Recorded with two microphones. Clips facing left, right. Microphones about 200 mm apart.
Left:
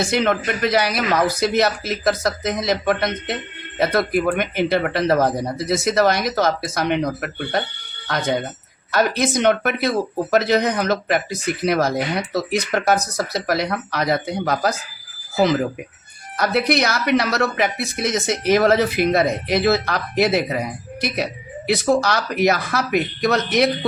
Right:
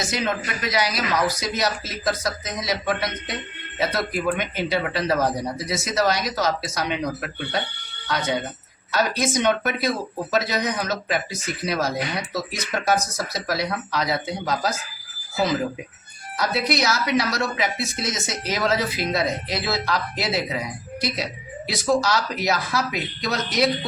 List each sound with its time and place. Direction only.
0.1 s speech: 60° left (ahead or behind)
16.4 s speech: 55° left (ahead or behind)